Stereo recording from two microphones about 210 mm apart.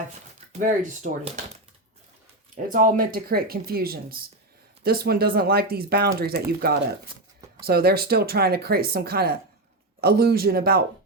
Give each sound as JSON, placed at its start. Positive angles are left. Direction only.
{"t": 0.6, "sound": "speech", "side_deg": -35}
{"t": 2.6, "sound": "speech", "side_deg": -40}